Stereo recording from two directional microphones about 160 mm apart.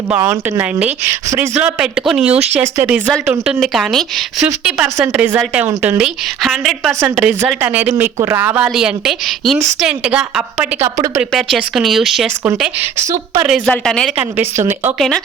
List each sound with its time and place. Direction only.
0.6 s a woman's voice: 10° right (ahead or behind)
13.4 s a woman's voice: centre (ahead or behind)
14.3 s speech: 15° right (ahead or behind)
14.9 s a woman's voice: centre (ahead or behind)